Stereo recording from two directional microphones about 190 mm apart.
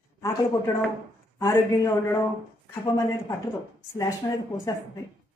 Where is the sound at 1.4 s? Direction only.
15° left (ahead or behind).